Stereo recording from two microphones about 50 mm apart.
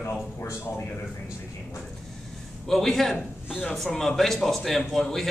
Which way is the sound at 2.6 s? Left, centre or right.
Centre.